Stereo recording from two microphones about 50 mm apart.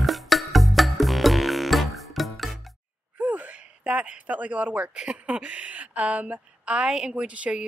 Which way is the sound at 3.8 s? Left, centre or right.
Right.